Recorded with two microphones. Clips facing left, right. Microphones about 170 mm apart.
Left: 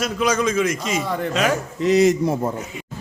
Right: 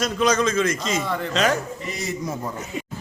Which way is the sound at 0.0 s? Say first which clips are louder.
Even; 10° left (ahead or behind).